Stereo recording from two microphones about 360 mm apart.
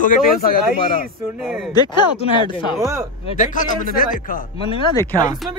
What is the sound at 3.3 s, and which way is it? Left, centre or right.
Speech, left.